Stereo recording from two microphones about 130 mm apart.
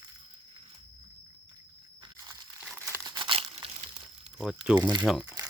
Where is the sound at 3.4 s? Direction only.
55° right (ahead or behind).